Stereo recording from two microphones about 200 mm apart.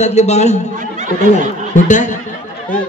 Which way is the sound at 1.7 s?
40° left (ahead or behind).